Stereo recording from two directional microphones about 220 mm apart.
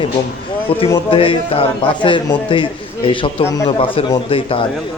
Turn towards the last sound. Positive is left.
turn(degrees=25)  # may be behind; listen again after turning